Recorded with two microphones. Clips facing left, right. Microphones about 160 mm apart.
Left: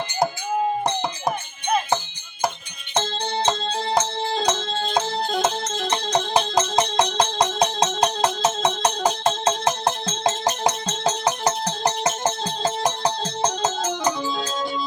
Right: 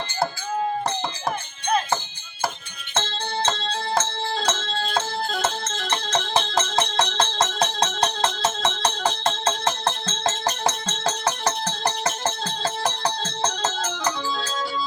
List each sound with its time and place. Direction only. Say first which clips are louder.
2.9 s music: left 3 dB; 15° left (ahead or behind)